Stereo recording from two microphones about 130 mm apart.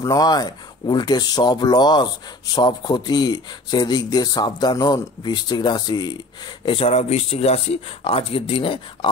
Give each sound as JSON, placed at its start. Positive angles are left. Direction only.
{"t": 0.0, "sound": "speech", "side_deg": 30}
{"t": 6.6, "sound": "speech", "side_deg": 45}